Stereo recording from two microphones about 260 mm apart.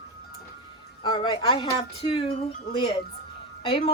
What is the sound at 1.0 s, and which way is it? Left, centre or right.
Speech, centre.